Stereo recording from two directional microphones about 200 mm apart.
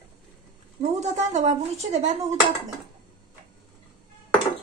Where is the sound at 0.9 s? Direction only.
35° right (ahead or behind).